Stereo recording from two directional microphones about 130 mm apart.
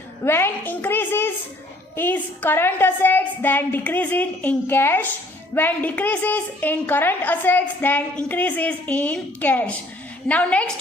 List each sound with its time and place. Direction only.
0.3 s a woman's voice: 20° left (ahead or behind)